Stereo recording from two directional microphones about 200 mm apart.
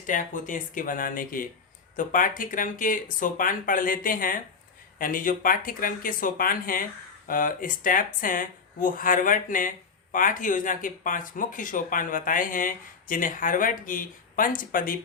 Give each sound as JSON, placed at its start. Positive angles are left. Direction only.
{"t": 0.1, "sound": "speech", "side_deg": 40}